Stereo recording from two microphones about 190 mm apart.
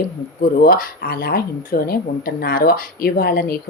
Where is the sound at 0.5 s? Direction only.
50° left (ahead or behind).